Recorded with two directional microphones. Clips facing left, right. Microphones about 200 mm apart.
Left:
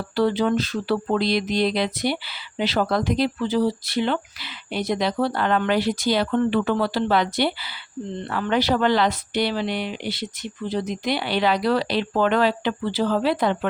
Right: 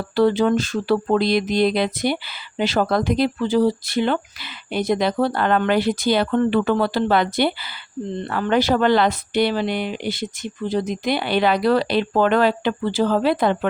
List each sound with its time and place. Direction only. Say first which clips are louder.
0.2 s speech: right 3 dB; 50° right (ahead or behind)